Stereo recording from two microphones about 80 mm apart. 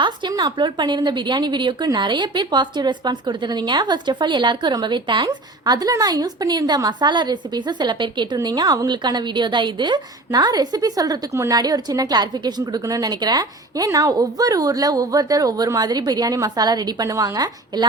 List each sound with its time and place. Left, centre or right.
0.0 s a woman's voice: right
8.4 s a woman's voice: right
8.9 s a woman's voice: right
12.8 s a woman's voice: right